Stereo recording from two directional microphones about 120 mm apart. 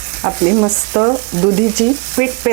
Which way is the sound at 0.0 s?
25° right (ahead or behind).